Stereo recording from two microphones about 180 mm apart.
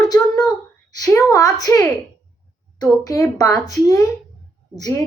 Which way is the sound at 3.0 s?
20° left (ahead or behind).